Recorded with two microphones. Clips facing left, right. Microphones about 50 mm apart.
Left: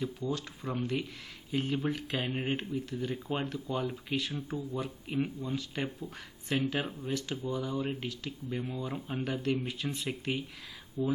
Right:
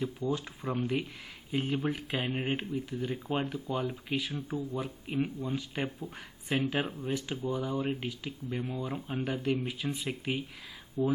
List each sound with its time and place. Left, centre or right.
0.0 s speech: centre
11.0 s speech: right